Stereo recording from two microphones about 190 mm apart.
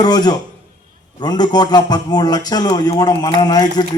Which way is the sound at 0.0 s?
20° left (ahead or behind).